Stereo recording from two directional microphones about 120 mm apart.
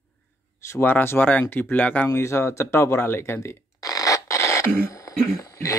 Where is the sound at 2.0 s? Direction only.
25° left (ahead or behind).